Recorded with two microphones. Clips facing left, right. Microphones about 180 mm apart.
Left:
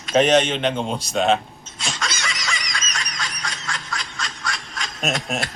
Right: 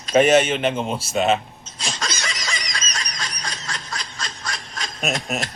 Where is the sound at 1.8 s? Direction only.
40° right (ahead or behind).